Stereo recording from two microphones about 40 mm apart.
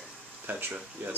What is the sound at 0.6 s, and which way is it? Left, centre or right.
Speech, right.